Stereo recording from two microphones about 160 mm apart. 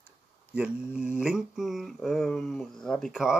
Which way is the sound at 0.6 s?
5° right (ahead or behind).